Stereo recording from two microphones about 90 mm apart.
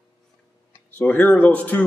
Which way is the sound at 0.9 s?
20° left (ahead or behind).